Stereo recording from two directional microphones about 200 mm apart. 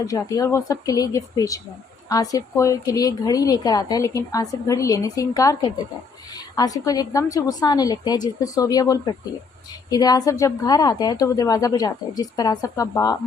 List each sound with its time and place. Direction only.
0.0 s a woman's voice: 15° left (ahead or behind)